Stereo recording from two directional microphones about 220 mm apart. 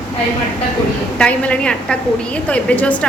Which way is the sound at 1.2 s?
5° left (ahead or behind).